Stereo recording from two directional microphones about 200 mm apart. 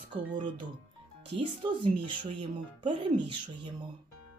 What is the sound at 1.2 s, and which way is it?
Speech, 25° right (ahead or behind).